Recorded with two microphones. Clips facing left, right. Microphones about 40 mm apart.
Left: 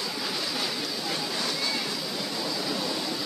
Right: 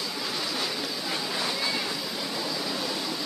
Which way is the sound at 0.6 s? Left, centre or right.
Centre.